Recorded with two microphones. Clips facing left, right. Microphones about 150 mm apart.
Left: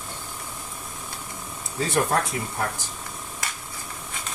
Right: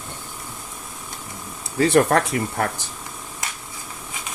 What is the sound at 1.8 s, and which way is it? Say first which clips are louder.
Speech: right 7 dB; 75° right (ahead or behind).